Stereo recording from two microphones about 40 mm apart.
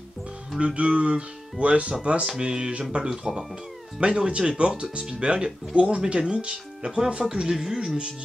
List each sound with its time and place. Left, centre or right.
0.7 s speech: right
3.1 s speech: centre
4.0 s speech: right